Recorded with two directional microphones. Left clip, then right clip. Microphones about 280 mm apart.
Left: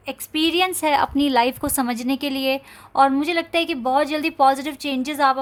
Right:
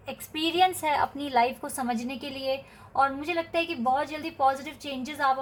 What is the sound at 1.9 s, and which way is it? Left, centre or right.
A woman's voice, left.